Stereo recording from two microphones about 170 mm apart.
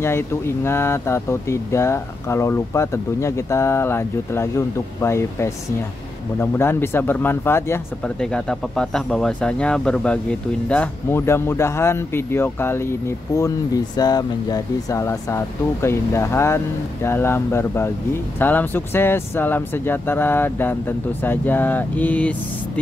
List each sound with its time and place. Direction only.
0.0 s speech: 15° left (ahead or behind)
13.9 s speech: 25° left (ahead or behind)